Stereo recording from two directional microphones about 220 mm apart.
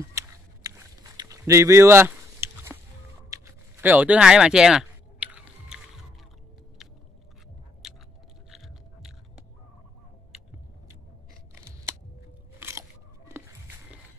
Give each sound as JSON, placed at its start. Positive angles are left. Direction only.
{"t": 0.1, "sound": "a sound", "side_deg": -15}
{"t": 7.8, "sound": "chewing", "side_deg": 0}
{"t": 12.5, "sound": "scissors", "side_deg": -10}